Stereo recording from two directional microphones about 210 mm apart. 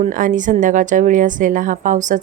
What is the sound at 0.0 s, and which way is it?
A woman's voice, 40° right (ahead or behind).